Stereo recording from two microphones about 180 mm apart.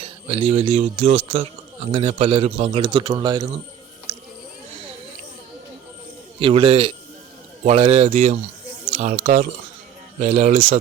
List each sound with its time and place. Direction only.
0.0 s speech: 35° right (ahead or behind)
6.4 s speech: 30° right (ahead or behind)